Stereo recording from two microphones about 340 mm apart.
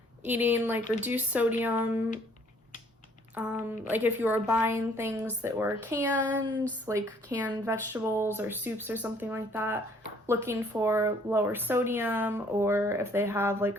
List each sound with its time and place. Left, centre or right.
0.2 s a woman's voice: centre
3.3 s a woman's voice: centre